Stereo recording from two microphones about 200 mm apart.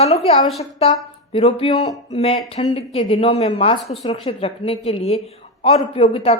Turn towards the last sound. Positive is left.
turn(degrees=30)  # may be behind; listen again after turning